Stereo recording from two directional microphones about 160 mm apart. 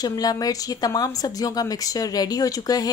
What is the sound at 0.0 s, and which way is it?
A woman's voice, 25° left (ahead or behind).